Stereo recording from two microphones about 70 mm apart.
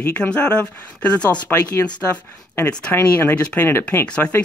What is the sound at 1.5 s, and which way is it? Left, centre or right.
Speech, left.